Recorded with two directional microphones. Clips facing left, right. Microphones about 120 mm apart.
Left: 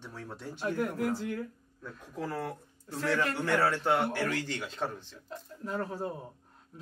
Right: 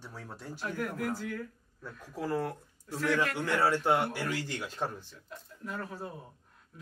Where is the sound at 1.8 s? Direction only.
10° right (ahead or behind).